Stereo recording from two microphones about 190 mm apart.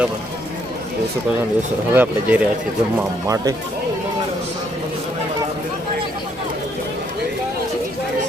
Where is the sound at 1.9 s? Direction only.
10° right (ahead or behind).